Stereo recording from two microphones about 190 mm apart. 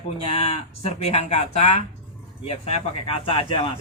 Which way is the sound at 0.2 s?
35° left (ahead or behind).